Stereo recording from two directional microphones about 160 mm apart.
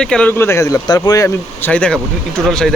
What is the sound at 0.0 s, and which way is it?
Speech, 5° left (ahead or behind).